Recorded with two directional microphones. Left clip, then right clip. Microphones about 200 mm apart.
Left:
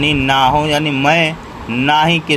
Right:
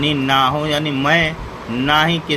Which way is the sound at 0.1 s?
15° left (ahead or behind).